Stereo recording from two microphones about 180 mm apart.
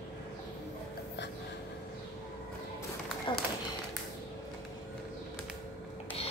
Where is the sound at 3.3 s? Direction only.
25° left (ahead or behind).